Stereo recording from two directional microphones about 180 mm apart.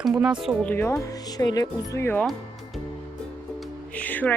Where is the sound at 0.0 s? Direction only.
5° right (ahead or behind).